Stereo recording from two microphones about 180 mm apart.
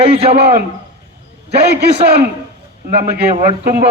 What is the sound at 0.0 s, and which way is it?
Speech, 35° right (ahead or behind).